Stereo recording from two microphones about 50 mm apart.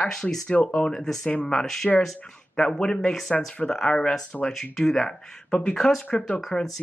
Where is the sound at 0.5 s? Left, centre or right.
Left.